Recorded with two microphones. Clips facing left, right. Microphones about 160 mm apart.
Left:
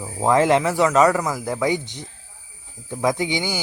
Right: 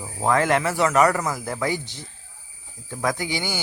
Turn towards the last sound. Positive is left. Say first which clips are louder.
# left 4 dB
turn(degrees=15)  # may be behind; listen again after turning